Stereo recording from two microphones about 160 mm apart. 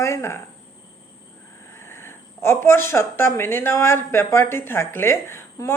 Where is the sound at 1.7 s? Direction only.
15° left (ahead or behind).